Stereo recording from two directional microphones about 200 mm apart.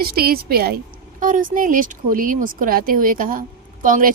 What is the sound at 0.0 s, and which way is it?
Speech, 50° right (ahead or behind).